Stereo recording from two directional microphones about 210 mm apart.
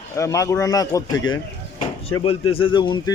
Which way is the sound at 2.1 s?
25° left (ahead or behind).